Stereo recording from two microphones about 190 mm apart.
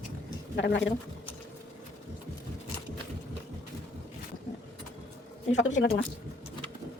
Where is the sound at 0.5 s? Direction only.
70° left (ahead or behind).